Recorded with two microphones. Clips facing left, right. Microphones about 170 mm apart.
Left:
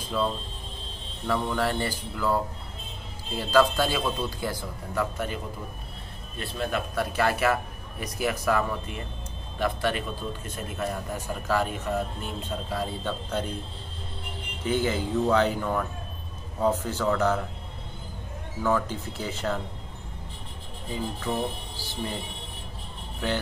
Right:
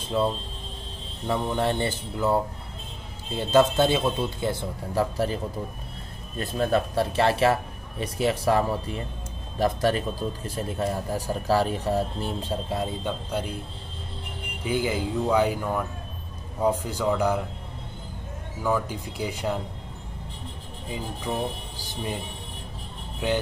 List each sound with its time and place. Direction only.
0.0 s a man's voice: 25° right (ahead or behind)
13.0 s speech: 10° right (ahead or behind)
14.6 s speech: 10° right (ahead or behind)
18.6 s speech: 10° right (ahead or behind)
23.2 s speech: 15° right (ahead or behind)